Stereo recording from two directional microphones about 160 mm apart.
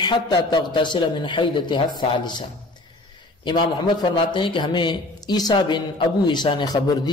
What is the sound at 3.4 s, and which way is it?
A man's voice, 30° left (ahead or behind).